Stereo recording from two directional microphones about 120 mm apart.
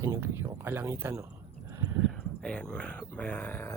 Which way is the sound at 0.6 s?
20° right (ahead or behind).